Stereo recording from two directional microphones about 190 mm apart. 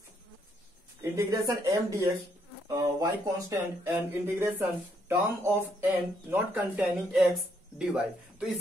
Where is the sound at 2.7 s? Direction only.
20° right (ahead or behind).